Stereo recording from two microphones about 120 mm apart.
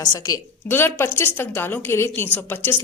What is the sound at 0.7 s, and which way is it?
A woman's voice, 20° left (ahead or behind).